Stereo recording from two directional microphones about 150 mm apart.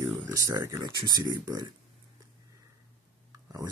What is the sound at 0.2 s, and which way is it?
Speech, 20° right (ahead or behind).